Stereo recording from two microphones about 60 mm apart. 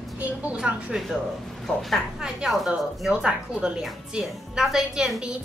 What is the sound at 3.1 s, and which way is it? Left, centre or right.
A woman's voice, centre.